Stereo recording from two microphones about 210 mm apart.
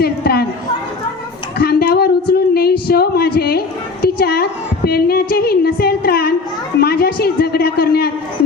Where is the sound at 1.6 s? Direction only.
45° left (ahead or behind).